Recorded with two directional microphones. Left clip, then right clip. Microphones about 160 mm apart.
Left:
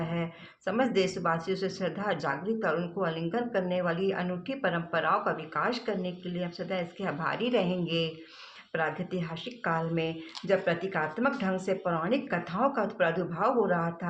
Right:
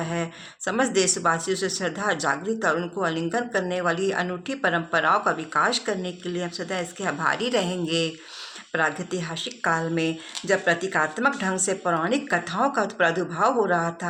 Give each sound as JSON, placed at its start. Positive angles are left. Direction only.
{"t": 0.0, "sound": "speech", "side_deg": -25}